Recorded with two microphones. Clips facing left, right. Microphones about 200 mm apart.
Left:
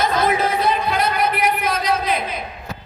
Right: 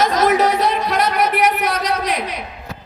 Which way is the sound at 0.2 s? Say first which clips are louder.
Right 4 dB; 75° right (ahead or behind).